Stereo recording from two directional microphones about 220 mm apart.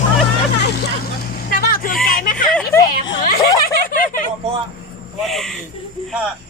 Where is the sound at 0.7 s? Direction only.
45° left (ahead or behind).